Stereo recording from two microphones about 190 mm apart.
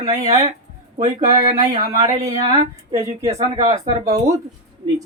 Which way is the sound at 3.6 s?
20° right (ahead or behind).